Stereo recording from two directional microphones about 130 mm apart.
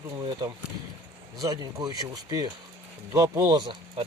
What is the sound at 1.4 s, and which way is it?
Speech, 25° right (ahead or behind).